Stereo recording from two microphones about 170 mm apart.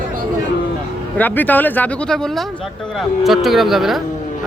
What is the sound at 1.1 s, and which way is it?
Speech, 10° left (ahead or behind).